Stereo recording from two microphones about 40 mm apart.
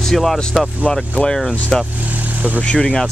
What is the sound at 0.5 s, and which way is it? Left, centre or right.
Speech, centre.